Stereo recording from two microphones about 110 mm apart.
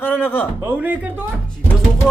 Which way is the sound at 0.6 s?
15° right (ahead or behind).